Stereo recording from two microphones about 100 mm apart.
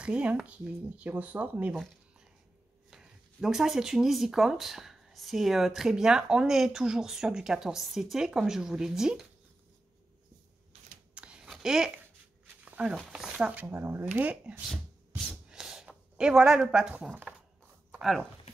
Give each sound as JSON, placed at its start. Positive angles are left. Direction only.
{"t": 0.0, "sound": "speech", "side_deg": -10}
{"t": 2.9, "sound": "speech", "side_deg": -5}
{"t": 11.1, "sound": "a sound", "side_deg": -10}
{"t": 13.1, "sound": "speech", "side_deg": -10}
{"t": 15.5, "sound": "a sound", "side_deg": -5}
{"t": 17.1, "sound": "speech", "side_deg": -20}